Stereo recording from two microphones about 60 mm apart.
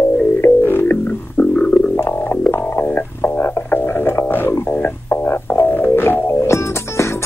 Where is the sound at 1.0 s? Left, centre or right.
Left.